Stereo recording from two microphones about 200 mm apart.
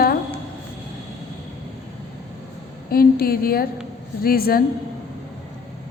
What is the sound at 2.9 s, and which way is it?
A woman's voice, 50° left (ahead or behind).